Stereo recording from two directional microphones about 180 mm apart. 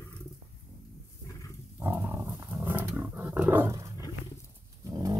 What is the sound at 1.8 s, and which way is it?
Roaring cats, 10° right (ahead or behind).